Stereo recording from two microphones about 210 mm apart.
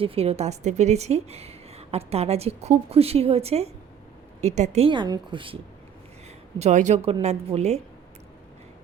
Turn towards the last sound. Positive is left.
turn(degrees=-30)  # may be behind; listen again after turning